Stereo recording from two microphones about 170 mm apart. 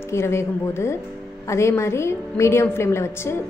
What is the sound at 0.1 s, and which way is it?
A woman's voice, 15° left (ahead or behind).